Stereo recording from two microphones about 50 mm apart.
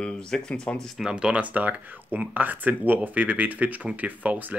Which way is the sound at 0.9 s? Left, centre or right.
Centre.